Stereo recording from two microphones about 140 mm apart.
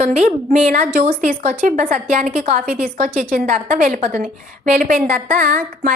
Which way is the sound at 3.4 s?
65° right (ahead or behind).